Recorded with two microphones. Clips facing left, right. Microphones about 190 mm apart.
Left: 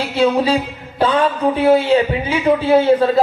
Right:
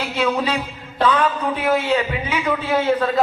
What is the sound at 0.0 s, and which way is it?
A man's voice, 30° left (ahead or behind).